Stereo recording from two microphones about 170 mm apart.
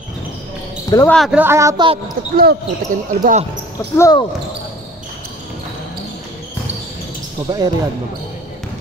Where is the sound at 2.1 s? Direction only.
65° right (ahead or behind).